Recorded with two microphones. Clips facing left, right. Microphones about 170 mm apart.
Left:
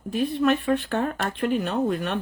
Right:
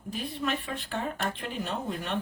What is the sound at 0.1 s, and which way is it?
Speech, 65° left (ahead or behind).